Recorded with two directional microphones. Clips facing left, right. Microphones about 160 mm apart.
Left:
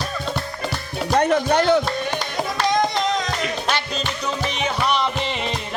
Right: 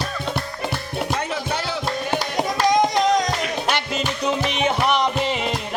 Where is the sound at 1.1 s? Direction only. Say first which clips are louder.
Left 8 dB; 55° left (ahead or behind).